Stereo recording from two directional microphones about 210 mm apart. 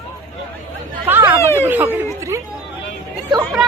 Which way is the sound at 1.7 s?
10° right (ahead or behind).